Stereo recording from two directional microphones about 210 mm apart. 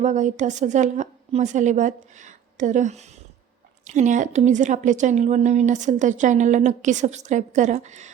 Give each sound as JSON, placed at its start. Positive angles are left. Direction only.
{"t": 0.0, "sound": "a woman's voice", "side_deg": -35}